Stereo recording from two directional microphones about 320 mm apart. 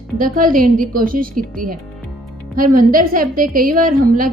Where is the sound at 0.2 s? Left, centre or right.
Right.